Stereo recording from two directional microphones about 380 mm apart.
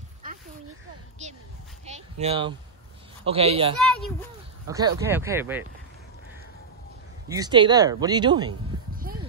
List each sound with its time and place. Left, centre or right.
1.2 s speech: centre
1.9 s a sound: centre
3.3 s speech: centre
3.8 s a child's voice: centre
4.6 s speech: centre
7.2 s speech: centre